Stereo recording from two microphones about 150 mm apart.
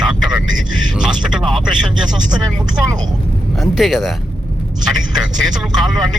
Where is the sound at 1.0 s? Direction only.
5° right (ahead or behind).